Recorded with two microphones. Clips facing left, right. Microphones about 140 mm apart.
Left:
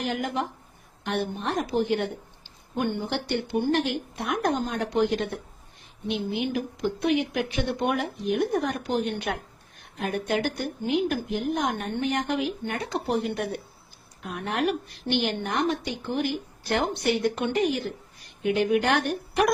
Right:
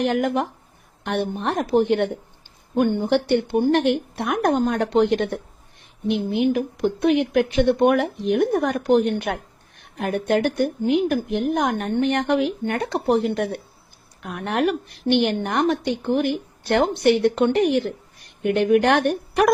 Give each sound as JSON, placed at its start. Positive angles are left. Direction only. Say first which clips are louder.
{"t": 0.0, "sound": "speech", "louder": "right 7 dB", "side_deg": -60}
{"t": 2.7, "sound": "speech", "louder": "right 8 dB", "side_deg": -50}